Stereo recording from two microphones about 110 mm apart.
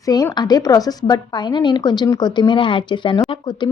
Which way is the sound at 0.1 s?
35° left (ahead or behind).